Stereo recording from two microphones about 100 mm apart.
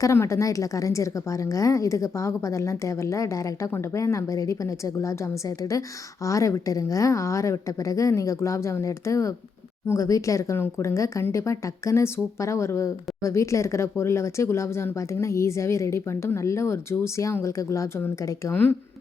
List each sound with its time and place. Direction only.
0.0 s a woman's voice: 30° left (ahead or behind)
18.5 s a woman's voice: 20° left (ahead or behind)